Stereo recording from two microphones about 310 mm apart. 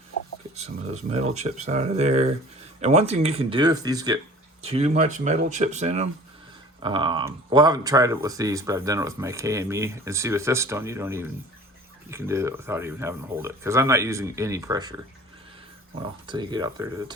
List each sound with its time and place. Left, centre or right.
0.5 s speech: right
16.2 s speech: centre